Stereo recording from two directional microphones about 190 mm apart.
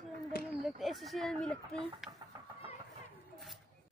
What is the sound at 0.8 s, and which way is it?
A woman's voice, centre (ahead or behind).